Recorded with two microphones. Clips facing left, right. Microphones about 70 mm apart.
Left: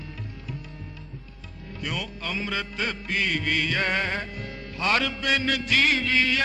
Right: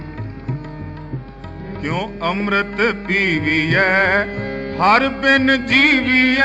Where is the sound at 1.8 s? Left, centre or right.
Right.